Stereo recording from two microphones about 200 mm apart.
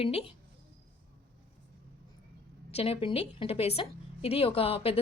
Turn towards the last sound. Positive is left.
turn(degrees=30)  # may be behind; listen again after turning